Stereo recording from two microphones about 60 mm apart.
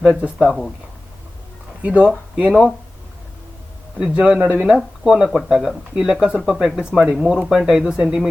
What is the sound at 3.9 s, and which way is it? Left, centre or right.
A man's voice, centre.